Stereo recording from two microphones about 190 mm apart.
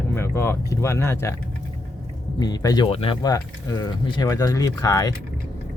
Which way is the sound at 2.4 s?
20° left (ahead or behind).